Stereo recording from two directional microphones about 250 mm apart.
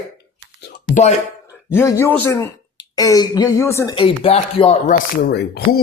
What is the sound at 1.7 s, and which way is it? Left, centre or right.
Speech, centre.